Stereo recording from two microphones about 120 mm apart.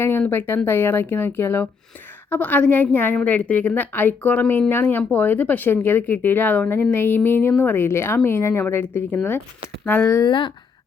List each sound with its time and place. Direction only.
0.0 s speech: 15° left (ahead or behind)
10.1 s speech: 30° left (ahead or behind)